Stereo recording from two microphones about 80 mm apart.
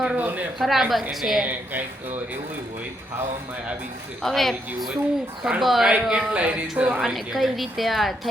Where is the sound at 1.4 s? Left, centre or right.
Right.